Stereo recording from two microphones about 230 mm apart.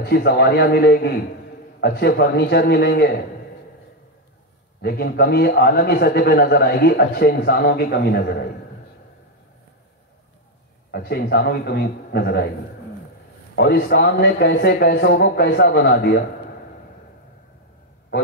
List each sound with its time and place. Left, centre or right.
0.0 s a man's voice: left
4.8 s a man's voice: left
10.9 s a man's voice: left
13.6 s a man's voice: left